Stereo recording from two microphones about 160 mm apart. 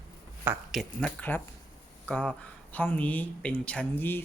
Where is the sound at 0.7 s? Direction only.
5° left (ahead or behind).